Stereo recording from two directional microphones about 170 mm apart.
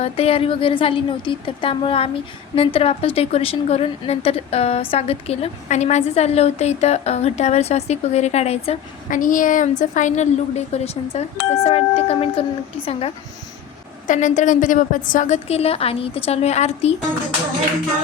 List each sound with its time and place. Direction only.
0.0 s a woman's voice: 35° left (ahead or behind)
9.0 s a woman's voice: 50° left (ahead or behind); by 13.1 s 35° left (ahead or behind)
14.1 s a woman's voice: 45° left (ahead or behind)